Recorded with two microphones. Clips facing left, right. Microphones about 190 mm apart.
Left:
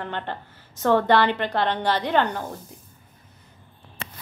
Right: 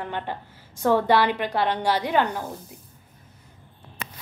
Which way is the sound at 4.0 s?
30° left (ahead or behind).